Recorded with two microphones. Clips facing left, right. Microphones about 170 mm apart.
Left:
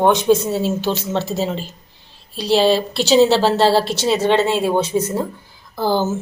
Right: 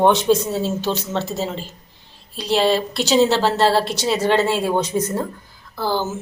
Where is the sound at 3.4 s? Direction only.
30° left (ahead or behind).